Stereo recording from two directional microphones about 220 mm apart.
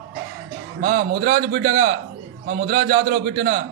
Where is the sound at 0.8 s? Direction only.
45° right (ahead or behind).